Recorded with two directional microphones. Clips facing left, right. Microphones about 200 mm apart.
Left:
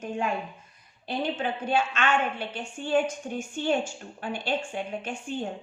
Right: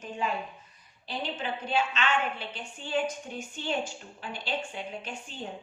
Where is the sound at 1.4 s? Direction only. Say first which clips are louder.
Left 1 dB; 50° left (ahead or behind).